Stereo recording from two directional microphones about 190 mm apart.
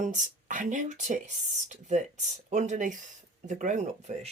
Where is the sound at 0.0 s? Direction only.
40° right (ahead or behind).